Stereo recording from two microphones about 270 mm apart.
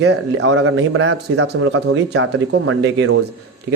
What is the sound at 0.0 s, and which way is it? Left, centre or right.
Speech, right.